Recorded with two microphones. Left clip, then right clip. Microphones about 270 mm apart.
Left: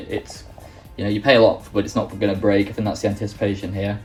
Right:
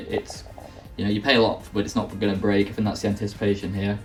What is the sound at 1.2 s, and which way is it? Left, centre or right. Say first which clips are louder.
Speech: left 6 dB; centre.